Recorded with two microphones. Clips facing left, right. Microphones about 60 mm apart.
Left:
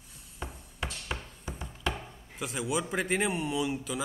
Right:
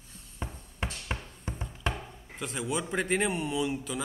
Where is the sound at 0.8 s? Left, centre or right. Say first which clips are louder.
Right 1 dB; right.